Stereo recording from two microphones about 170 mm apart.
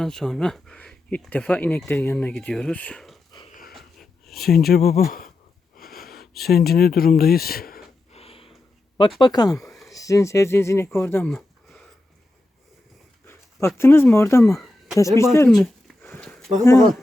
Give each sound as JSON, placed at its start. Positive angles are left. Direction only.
{"t": 0.0, "sound": "speech", "side_deg": 5}
{"t": 4.4, "sound": "speech", "side_deg": 65}
{"t": 5.7, "sound": "wheeze", "side_deg": 60}
{"t": 6.5, "sound": "speech", "side_deg": 65}
{"t": 8.1, "sound": "a sound", "side_deg": 35}
{"t": 9.0, "sound": "speech", "side_deg": 30}
{"t": 11.3, "sound": "a sound", "side_deg": 0}
{"t": 13.2, "sound": "speech", "side_deg": 15}
{"t": 15.4, "sound": "a sound", "side_deg": 0}